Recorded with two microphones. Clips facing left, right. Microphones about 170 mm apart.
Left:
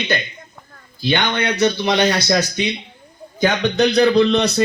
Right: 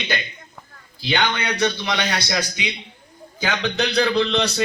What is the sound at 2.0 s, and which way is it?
Speech, 50° left (ahead or behind).